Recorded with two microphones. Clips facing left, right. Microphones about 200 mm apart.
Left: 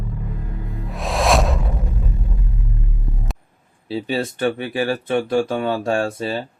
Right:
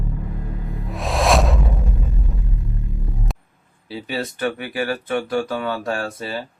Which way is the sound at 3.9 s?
25° left (ahead or behind).